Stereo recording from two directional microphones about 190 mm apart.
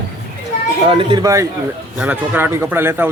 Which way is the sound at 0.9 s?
25° right (ahead or behind).